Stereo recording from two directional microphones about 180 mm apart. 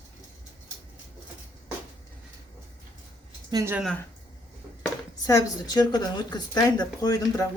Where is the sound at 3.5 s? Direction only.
15° right (ahead or behind).